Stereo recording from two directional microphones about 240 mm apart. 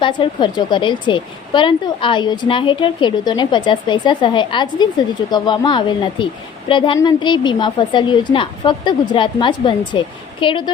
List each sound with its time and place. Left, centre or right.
0.0 s a woman's voice: left